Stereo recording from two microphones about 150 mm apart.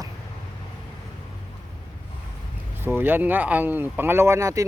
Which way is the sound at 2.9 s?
15° right (ahead or behind).